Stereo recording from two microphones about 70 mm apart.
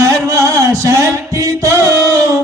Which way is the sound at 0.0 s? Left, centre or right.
Right.